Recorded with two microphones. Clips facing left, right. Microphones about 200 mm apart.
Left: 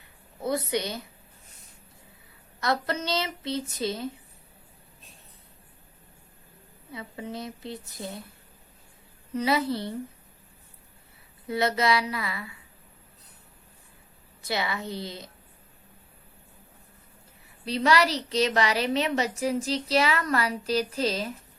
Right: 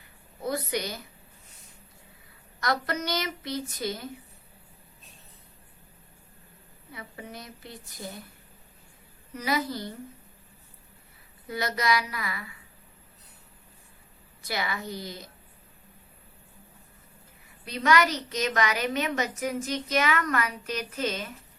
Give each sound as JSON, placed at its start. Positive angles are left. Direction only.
{"t": 0.4, "sound": "a woman's voice", "side_deg": 25}
{"t": 2.6, "sound": "a woman's voice", "side_deg": 25}
{"t": 6.9, "sound": "a woman's voice", "side_deg": 25}
{"t": 9.3, "sound": "a woman's voice", "side_deg": 30}
{"t": 11.4, "sound": "a woman's voice", "side_deg": 25}
{"t": 14.4, "sound": "a woman's voice", "side_deg": 25}
{"t": 17.7, "sound": "a woman's voice", "side_deg": 30}